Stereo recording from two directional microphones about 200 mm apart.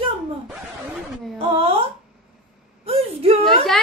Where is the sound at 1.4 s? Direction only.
30° right (ahead or behind).